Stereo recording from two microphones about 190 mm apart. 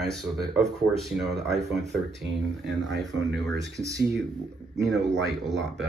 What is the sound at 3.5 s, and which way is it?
Speech, 15° right (ahead or behind).